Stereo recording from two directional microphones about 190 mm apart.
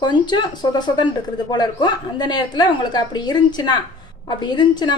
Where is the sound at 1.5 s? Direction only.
20° left (ahead or behind).